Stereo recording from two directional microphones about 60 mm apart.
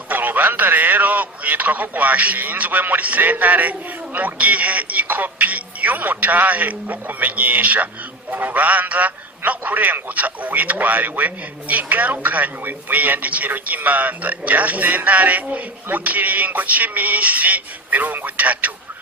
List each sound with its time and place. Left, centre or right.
0.1 s speech: right